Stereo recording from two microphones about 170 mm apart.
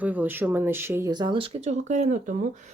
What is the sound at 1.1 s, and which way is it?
Speech, 25° right (ahead or behind).